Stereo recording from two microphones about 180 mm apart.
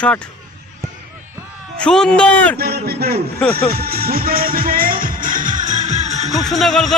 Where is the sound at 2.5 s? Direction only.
60° right (ahead or behind).